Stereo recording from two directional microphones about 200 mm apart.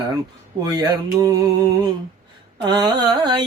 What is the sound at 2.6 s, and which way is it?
Speech, 20° right (ahead or behind).